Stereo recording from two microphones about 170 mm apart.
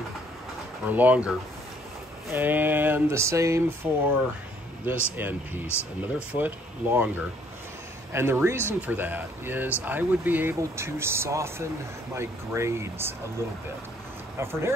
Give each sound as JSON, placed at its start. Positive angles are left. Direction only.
{"t": 0.8, "sound": "speech", "side_deg": -10}
{"t": 2.3, "sound": "speech", "side_deg": -10}
{"t": 5.1, "sound": "speech", "side_deg": -10}
{"t": 5.7, "sound": "speech", "side_deg": 15}
{"t": 6.3, "sound": "speech", "side_deg": -10}
{"t": 14.4, "sound": "speech", "side_deg": -15}